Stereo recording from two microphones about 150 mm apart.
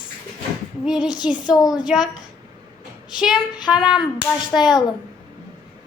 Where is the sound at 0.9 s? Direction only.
5° right (ahead or behind).